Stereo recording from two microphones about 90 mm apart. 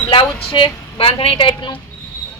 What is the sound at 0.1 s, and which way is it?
Speech, 70° left (ahead or behind).